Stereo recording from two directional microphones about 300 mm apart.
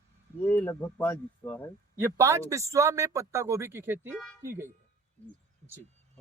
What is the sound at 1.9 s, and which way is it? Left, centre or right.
A man's voice, centre.